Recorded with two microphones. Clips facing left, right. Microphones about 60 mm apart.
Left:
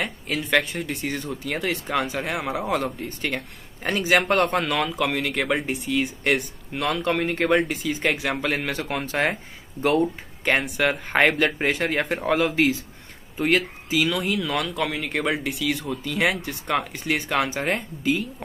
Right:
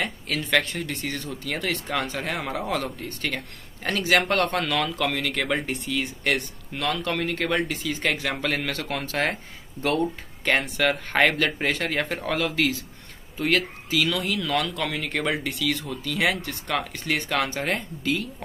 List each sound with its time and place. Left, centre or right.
0.0 s speech: centre